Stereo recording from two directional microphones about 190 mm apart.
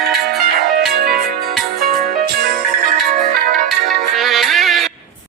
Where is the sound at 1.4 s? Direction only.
Centre (ahead or behind).